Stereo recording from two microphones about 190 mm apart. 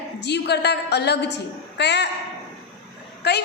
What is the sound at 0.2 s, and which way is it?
A woman's voice, 60° left (ahead or behind).